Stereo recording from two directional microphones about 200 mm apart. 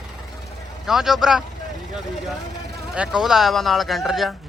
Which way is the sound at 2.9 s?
5° right (ahead or behind).